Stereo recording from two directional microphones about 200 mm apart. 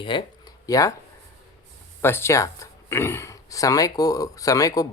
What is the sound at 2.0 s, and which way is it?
Speech, 10° left (ahead or behind).